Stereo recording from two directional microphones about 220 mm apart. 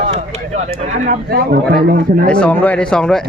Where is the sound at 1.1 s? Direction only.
45° right (ahead or behind).